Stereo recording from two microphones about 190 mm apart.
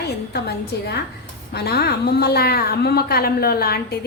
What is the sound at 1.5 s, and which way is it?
A woman's voice, 55° left (ahead or behind).